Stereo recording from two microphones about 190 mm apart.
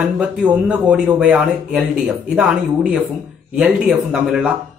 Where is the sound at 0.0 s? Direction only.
5° right (ahead or behind).